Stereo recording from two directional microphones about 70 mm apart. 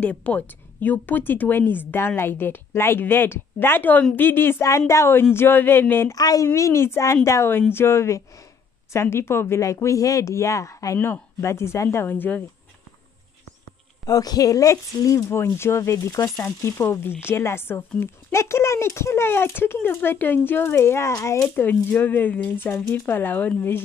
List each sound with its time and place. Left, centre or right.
0.0 s a woman's voice: left
4.6 s speech: left
6.1 s speech: left
11.0 s speech: left
12.1 s a woman's voice: left
14.0 s speech: left
15.2 s speech: left
21.5 s a woman's voice: left